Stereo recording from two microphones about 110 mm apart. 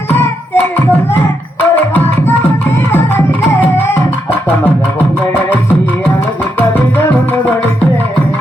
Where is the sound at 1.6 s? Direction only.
15° left (ahead or behind).